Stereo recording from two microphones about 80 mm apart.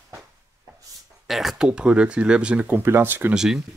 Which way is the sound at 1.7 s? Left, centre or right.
Centre.